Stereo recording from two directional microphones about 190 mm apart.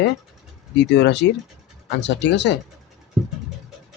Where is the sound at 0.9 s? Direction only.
65° left (ahead or behind).